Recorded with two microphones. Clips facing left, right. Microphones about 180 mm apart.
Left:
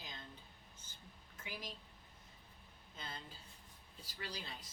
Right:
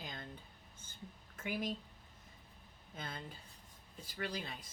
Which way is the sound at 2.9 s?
55° right (ahead or behind).